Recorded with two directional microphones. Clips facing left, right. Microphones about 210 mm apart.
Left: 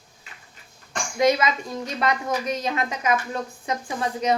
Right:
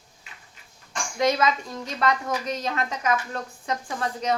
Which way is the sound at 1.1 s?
10° left (ahead or behind).